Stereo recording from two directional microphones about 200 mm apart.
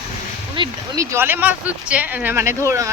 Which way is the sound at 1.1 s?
10° right (ahead or behind).